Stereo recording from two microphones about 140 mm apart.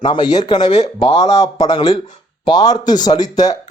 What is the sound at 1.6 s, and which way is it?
Speech, 50° left (ahead or behind).